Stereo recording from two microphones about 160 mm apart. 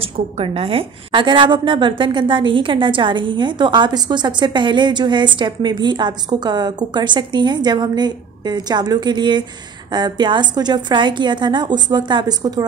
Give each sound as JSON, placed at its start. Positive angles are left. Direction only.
{"t": 0.0, "sound": "a woman's voice", "side_deg": -35}